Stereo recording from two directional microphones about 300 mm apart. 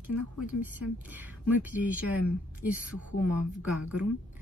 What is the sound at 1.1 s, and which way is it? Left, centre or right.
Speech, centre.